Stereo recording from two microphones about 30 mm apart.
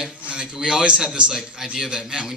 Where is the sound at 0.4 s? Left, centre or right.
Right.